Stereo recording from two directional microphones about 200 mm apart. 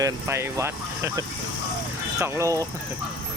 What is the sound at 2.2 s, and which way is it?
Speech, 15° right (ahead or behind).